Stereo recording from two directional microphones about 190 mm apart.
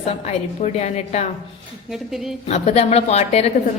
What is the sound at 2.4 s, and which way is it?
A woman's voice, 35° left (ahead or behind).